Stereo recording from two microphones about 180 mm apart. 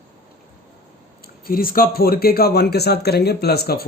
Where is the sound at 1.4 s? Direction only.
55° left (ahead or behind).